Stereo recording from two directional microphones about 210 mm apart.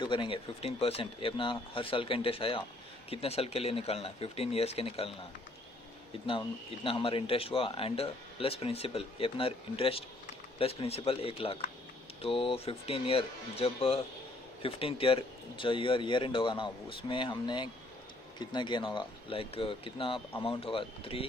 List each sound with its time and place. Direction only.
0.0 s speech: 20° left (ahead or behind)
6.8 s speech: 25° left (ahead or behind)